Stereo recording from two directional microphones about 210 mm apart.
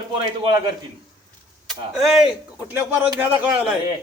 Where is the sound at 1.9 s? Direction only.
Centre (ahead or behind).